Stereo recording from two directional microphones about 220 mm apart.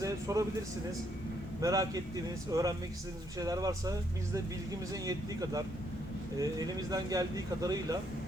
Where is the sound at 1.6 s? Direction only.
15° right (ahead or behind).